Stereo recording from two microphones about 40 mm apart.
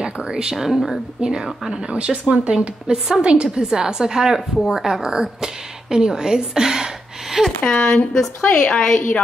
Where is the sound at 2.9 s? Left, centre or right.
Centre.